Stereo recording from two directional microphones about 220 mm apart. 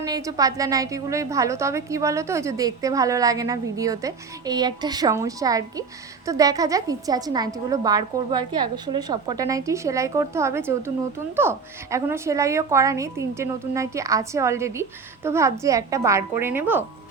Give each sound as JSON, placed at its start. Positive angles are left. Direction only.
{"t": 0.0, "sound": "a woman's voice", "side_deg": -15}